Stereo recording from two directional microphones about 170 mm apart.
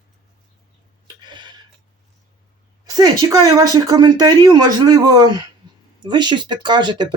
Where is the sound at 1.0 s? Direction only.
25° right (ahead or behind).